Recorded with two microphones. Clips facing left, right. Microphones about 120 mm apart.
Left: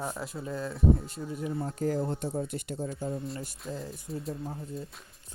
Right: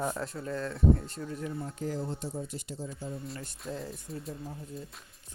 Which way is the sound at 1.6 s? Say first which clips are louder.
Left 9 dB; 40° left (ahead or behind).